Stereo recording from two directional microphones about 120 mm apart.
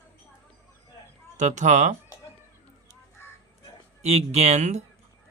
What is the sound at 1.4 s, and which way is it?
Speech, 85° right.